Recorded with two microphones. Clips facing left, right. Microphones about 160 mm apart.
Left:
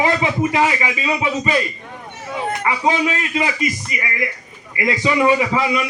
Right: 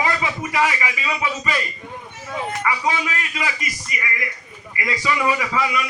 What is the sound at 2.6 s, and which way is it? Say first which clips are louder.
A man's voice: left 5 dB; 25° left (ahead or behind).